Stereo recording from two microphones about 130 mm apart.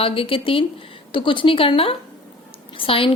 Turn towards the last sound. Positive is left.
turn(degrees=45)  # may be behind; listen again after turning